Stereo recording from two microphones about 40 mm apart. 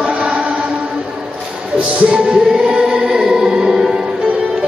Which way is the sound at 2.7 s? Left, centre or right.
Centre.